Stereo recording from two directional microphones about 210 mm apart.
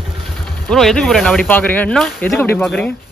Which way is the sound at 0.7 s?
5° left (ahead or behind).